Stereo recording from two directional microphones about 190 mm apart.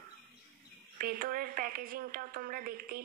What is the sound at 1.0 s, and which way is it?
A woman's voice, 50° right (ahead or behind).